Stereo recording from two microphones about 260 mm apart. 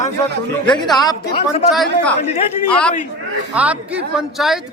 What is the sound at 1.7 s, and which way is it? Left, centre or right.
Speech, centre.